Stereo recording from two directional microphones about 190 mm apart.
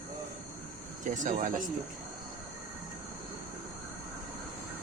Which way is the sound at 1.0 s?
40° right (ahead or behind).